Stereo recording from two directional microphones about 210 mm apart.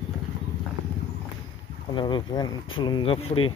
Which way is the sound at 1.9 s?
20° left (ahead or behind).